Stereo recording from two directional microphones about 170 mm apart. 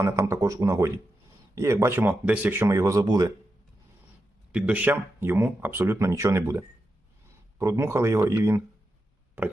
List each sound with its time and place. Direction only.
0.0 s speech: 20° right (ahead or behind)
4.5 s speech: 10° right (ahead or behind)